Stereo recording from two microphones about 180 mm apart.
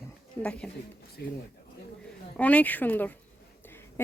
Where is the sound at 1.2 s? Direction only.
60° left (ahead or behind).